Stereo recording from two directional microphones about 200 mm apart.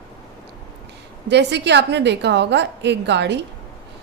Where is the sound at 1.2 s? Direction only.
60° right (ahead or behind).